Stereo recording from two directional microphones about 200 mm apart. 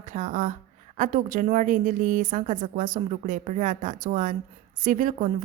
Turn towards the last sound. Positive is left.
turn(degrees=-40)  # may be behind; listen again after turning